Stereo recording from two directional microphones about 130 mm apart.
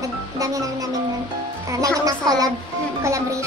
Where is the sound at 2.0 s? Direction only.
30° right (ahead or behind).